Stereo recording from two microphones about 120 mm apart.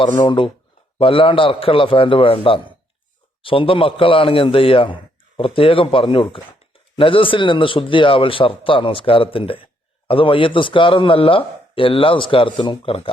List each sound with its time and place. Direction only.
0.2 s speech: 45° left (ahead or behind)